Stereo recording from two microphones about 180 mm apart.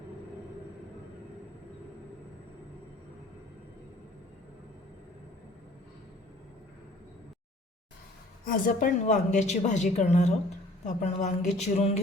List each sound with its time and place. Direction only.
8.4 s a woman's voice: 50° left (ahead or behind)